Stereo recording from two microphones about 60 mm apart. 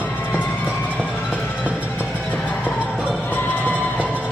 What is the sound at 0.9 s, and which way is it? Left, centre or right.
Music, left.